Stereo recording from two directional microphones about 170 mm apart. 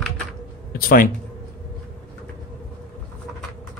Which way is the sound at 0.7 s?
60° left (ahead or behind).